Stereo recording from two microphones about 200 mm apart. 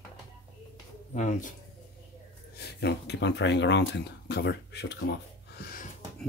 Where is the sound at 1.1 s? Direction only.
35° left (ahead or behind).